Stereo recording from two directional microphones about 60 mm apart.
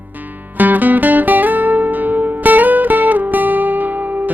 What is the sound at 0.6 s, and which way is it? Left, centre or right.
Music, right.